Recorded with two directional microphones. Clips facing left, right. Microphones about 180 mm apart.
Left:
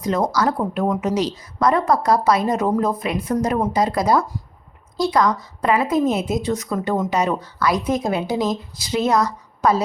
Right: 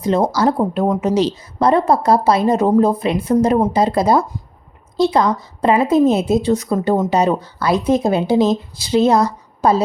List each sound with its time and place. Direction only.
0.0 s a woman's voice: 30° right (ahead or behind)